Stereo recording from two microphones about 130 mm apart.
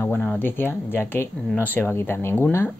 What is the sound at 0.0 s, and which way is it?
Speech, 15° left (ahead or behind).